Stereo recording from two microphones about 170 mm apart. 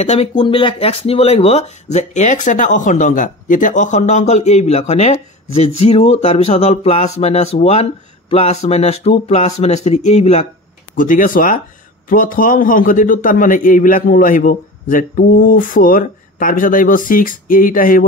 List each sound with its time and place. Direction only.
0.0 s a man's voice: 35° left (ahead or behind); by 18.0 s 55° left (ahead or behind)